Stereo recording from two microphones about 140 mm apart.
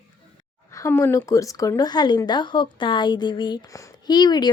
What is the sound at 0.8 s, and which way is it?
Speech, 20° left (ahead or behind).